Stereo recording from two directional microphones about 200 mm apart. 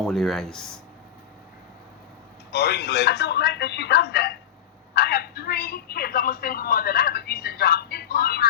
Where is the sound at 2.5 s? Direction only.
55° left (ahead or behind).